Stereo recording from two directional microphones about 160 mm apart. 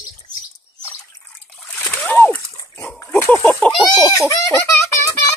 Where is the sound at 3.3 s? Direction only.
5° left (ahead or behind).